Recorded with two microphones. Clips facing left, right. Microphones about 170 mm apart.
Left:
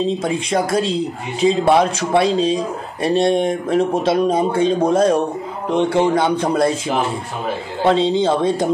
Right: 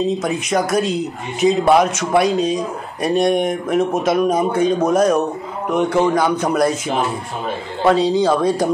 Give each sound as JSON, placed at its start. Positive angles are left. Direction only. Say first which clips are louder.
{"t": 0.0, "sound": "speech", "louder": "even", "side_deg": 30}
{"t": 7.8, "sound": "speech", "louder": "right 1 dB", "side_deg": 25}